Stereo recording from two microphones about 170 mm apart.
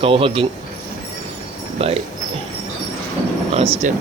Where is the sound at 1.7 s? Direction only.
35° right (ahead or behind).